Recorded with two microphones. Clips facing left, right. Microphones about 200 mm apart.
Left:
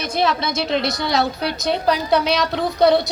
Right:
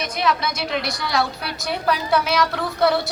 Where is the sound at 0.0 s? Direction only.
30° left (ahead or behind).